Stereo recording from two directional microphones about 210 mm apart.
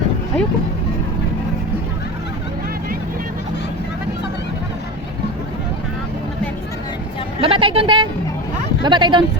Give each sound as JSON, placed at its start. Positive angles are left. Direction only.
{"t": 7.4, "sound": "a woman's voice", "side_deg": -25}